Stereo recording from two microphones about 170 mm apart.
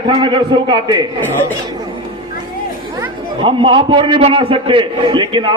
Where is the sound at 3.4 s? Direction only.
30° right (ahead or behind).